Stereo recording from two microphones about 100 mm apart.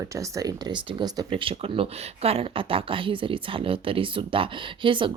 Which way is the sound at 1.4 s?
65° right (ahead or behind).